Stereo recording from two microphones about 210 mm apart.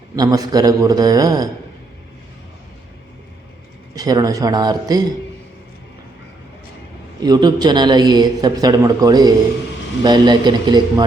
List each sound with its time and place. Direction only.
0.2 s a man's voice: 20° right (ahead or behind)
3.9 s a man's voice: 15° right (ahead or behind)
7.2 s speech: 20° right (ahead or behind)